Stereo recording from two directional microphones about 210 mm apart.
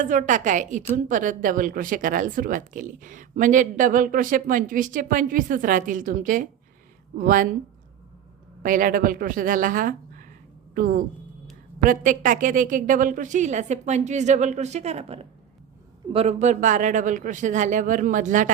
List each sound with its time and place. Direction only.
0.0 s a woman's voice: 35° right (ahead or behind)
8.6 s a woman's voice: 40° right (ahead or behind)